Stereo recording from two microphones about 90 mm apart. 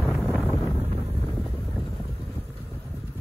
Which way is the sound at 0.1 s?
20° left (ahead or behind).